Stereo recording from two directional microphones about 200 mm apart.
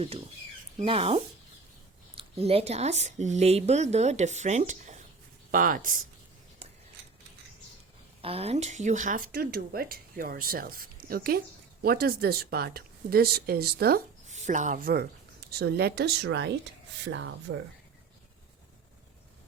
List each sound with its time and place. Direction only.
0.8 s speech: 30° right (ahead or behind)
8.2 s speech: 30° right (ahead or behind); by 14.0 s 50° right (ahead or behind)
14.3 s speech: 35° right (ahead or behind); by 17.2 s 65° right (ahead or behind)
17.5 s speech: 80° right